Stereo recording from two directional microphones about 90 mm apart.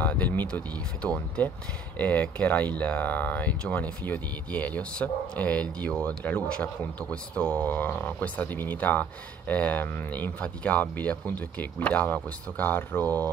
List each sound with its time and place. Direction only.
0.0 s speech: 15° left (ahead or behind)